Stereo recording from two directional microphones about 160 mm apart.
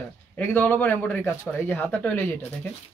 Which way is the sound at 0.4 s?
10° left (ahead or behind).